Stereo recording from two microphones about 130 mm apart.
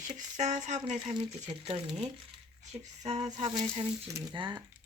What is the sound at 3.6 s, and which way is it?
Speech, 45° right (ahead or behind).